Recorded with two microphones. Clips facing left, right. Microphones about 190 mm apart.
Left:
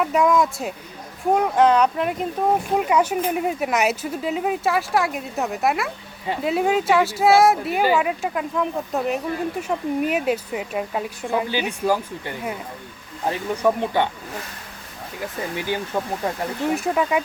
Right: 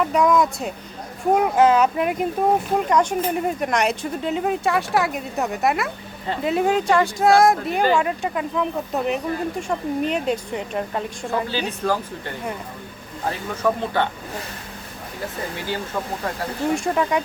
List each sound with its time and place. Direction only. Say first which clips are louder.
0.0 s speech: even; centre (ahead or behind)
2.7 s speech: even; 5° left (ahead or behind)
13.6 s speech: left 1 dB; 15° left (ahead or behind)
15.5 s speech: left 4 dB; 15° left (ahead or behind)
16.7 s speech: even; 5° left (ahead or behind)